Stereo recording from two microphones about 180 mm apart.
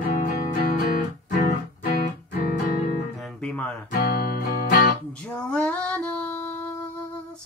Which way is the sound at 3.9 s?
55° left (ahead or behind).